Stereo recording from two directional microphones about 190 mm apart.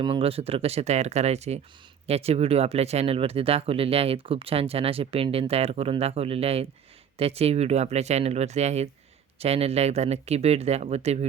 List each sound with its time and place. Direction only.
0.0 s speech: 30° right (ahead or behind)